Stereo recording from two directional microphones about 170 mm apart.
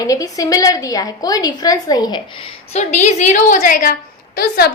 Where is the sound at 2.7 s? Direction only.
45° left (ahead or behind).